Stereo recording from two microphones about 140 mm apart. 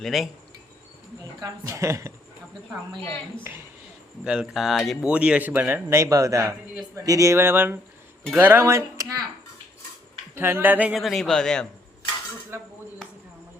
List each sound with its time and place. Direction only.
0.0 s a man's voice: centre (ahead or behind)
1.4 s speech: 25° right (ahead or behind)
3.5 s speech: 15° right (ahead or behind)
4.2 s speech: 5° right (ahead or behind); by 9.2 s 25° right (ahead or behind)
10.3 s a man's voice: 15° right (ahead or behind); by 11.7 s 5° left (ahead or behind)
12.5 s speech: 20° right (ahead or behind)